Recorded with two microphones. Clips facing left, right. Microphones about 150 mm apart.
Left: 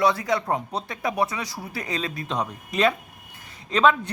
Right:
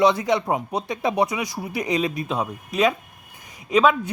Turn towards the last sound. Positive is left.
turn(degrees=-10)  # may be behind; listen again after turning